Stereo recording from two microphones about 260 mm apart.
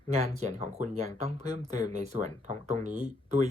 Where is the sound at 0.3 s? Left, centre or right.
Right.